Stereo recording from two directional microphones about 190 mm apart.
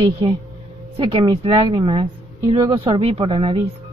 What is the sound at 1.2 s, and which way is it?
A woman's voice, 25° right (ahead or behind).